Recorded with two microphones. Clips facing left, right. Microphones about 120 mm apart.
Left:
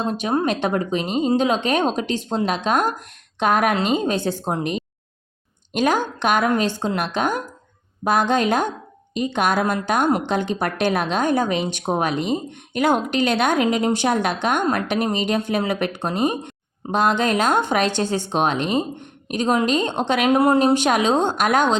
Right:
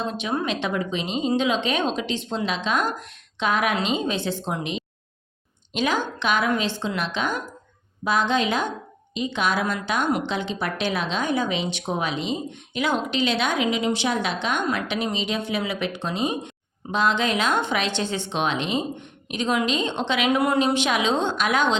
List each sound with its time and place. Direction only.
0.0 s speech: 45° left (ahead or behind)